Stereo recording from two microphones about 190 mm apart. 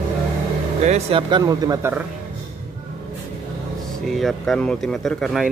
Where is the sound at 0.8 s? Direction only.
35° right (ahead or behind); by 2.0 s 15° right (ahead or behind).